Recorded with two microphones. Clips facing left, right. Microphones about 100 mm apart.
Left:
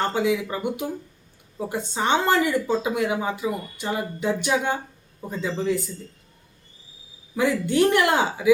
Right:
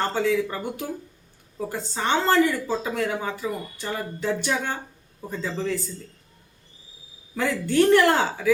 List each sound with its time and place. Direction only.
0.1 s speech: 10° left (ahead or behind)
7.3 s speech: 15° left (ahead or behind)